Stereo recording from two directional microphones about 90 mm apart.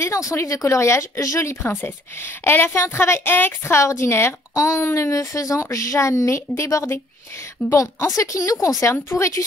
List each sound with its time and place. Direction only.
0.3 s speech: 35° left (ahead or behind)
8.9 s speech: 25° left (ahead or behind)